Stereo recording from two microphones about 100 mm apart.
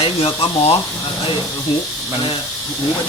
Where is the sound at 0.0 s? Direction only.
75° left (ahead or behind).